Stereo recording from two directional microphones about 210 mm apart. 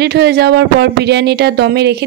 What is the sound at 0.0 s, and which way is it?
Speech, 50° right (ahead or behind).